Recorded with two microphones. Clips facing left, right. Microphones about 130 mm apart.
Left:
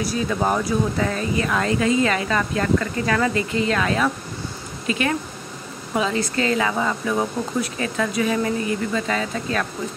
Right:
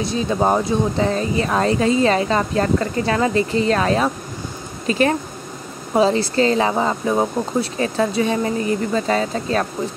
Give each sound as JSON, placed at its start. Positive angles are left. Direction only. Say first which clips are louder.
{"t": 0.0, "sound": "speech", "louder": "right 3 dB", "side_deg": -25}